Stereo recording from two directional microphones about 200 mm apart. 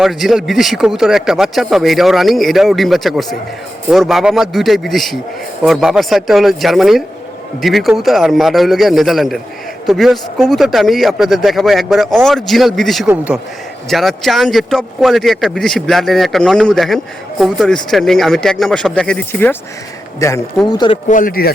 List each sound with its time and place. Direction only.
0.0 s speech: centre (ahead or behind); by 21.0 s 20° left (ahead or behind)
21.1 s a man's voice: 45° left (ahead or behind)